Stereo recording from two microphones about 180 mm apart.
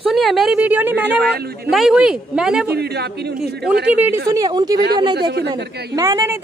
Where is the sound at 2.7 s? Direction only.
65° right (ahead or behind).